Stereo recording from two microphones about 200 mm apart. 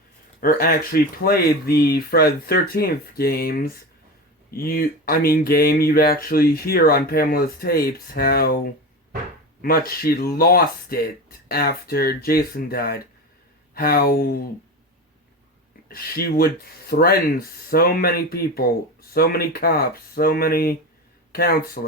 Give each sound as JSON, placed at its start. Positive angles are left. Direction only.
{"t": 0.3, "sound": "speech", "side_deg": 45}
{"t": 15.9, "sound": "speech", "side_deg": 50}
{"t": 21.8, "sound": "speech", "side_deg": 40}